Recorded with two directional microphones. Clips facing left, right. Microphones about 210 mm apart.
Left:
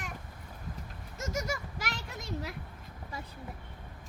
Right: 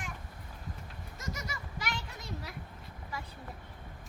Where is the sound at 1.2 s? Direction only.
45° left (ahead or behind).